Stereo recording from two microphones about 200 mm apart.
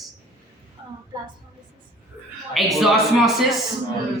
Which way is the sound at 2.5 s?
Centre (ahead or behind).